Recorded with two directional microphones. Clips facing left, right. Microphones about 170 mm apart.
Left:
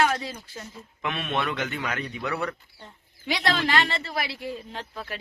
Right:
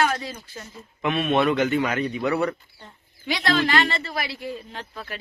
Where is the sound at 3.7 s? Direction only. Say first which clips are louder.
Right 2 dB; 25° left (ahead or behind).